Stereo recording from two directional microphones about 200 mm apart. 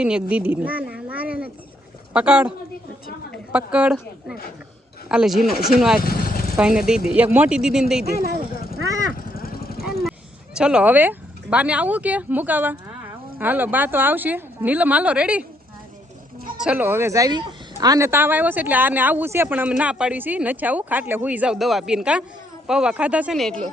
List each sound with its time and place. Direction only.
0.0 s a sound: 5° right (ahead or behind)
2.1 s speech: 5° right (ahead or behind)
3.5 s speech: 5° right (ahead or behind)
6.0 s vehicle: 45° left (ahead or behind)
6.6 s speech: 5° right (ahead or behind)
8.2 s a sound: 50° right (ahead or behind)
8.5 s a sound: 45° left (ahead or behind)
9.1 s vehicle: 45° left (ahead or behind)
10.1 s speech: 5° right (ahead or behind)
16.6 s speech: 5° right (ahead or behind)